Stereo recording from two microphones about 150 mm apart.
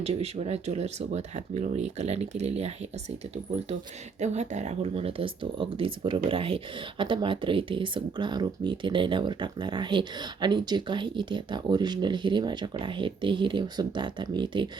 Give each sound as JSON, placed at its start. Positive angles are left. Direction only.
{"t": 0.0, "sound": "speech", "side_deg": -45}
{"t": 4.2, "sound": "speech", "side_deg": -50}